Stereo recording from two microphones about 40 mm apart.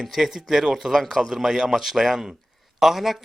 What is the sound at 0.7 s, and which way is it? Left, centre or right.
A man's voice, centre.